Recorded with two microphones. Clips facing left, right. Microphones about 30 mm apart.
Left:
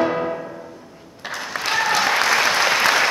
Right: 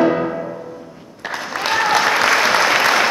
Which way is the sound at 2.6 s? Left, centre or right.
Centre.